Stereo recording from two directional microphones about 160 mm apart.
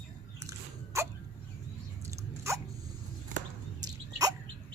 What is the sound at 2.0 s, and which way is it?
Biting, 20° right (ahead or behind).